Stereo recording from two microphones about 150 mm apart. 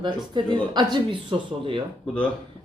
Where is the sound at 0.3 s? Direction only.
30° right (ahead or behind).